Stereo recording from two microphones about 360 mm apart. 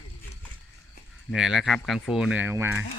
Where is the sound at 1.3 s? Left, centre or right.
Centre.